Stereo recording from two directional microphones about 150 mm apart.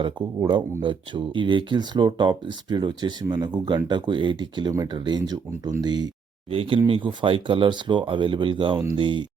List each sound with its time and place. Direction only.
0.0 s speech: 30° right (ahead or behind)